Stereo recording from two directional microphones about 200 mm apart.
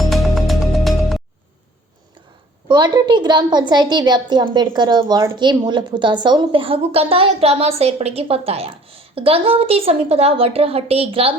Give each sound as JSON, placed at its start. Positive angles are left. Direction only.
{"t": 0.0, "sound": "music", "side_deg": 0}
{"t": 2.6, "sound": "a woman's voice", "side_deg": -20}